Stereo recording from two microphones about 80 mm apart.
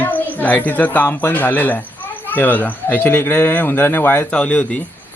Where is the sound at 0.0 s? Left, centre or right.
Left.